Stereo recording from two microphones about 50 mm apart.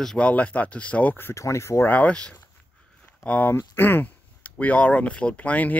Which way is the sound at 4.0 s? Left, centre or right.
Left.